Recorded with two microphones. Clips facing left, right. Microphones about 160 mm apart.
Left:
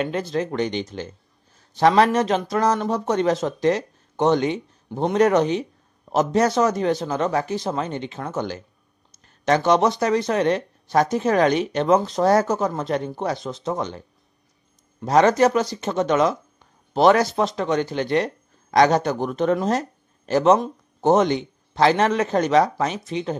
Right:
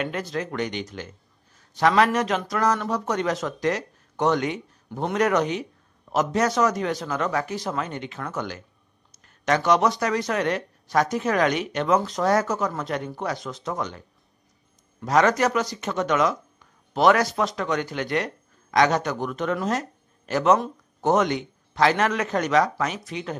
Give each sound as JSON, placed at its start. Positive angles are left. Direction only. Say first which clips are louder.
{"t": 0.0, "sound": "speech", "louder": "left 4 dB", "side_deg": 30}